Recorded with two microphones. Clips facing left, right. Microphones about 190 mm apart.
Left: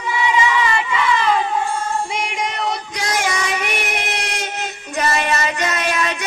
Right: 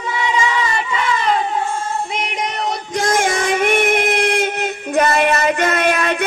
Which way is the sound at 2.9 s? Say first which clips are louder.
Right 8 dB; 50° right (ahead or behind).